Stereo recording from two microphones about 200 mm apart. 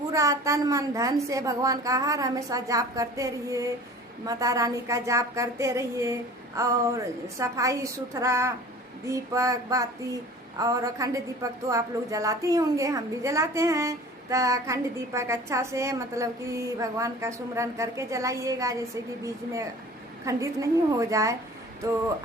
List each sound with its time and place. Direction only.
0.1 s a woman's voice: 15° right (ahead or behind)
20.2 s a woman's voice: 15° right (ahead or behind)